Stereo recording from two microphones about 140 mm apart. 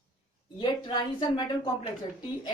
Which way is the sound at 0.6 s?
30° left (ahead or behind).